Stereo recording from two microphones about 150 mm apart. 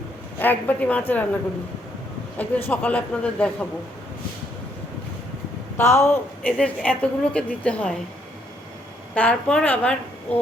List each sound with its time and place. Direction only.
0.3 s a woman's voice: 10° left (ahead or behind)
2.4 s a woman's voice: 10° left (ahead or behind)
5.7 s a woman's voice: 20° left (ahead or behind)
9.1 s a woman's voice: 5° left (ahead or behind)